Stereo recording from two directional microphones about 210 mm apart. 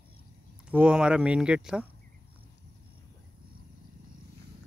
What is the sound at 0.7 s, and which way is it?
Speech, 5° right (ahead or behind).